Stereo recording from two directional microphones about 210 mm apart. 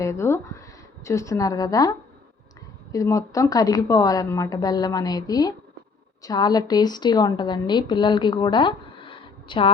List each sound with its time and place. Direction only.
0.0 s a woman's voice: 15° left (ahead or behind)